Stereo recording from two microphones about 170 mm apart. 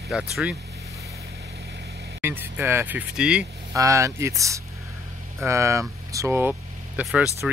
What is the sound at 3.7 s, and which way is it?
Speech, 20° right (ahead or behind).